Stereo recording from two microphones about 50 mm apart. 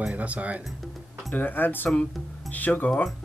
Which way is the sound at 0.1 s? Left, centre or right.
Right.